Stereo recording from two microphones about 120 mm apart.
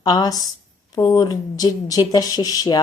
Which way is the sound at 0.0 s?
30° left (ahead or behind).